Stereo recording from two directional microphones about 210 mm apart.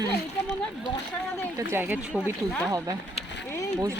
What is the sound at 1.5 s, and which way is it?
Speech, 10° right (ahead or behind).